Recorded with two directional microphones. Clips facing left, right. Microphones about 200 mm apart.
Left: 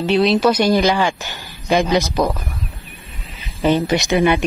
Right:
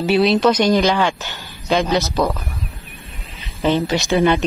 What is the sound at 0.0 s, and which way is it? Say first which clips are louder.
Speech: even; centre (ahead or behind).